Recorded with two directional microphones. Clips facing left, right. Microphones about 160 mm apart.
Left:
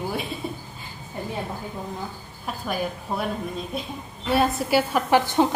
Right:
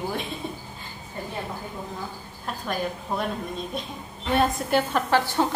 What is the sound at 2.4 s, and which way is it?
A woman's voice, 5° left (ahead or behind).